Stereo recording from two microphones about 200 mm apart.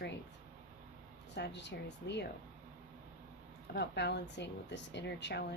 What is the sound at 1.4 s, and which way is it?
Speech, 60° left (ahead or behind).